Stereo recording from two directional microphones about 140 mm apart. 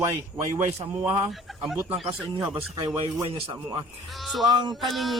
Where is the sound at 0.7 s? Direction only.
50° right (ahead or behind).